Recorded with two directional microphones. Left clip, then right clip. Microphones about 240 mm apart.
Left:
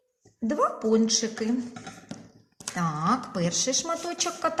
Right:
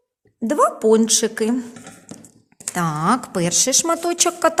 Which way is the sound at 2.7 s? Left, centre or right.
Right.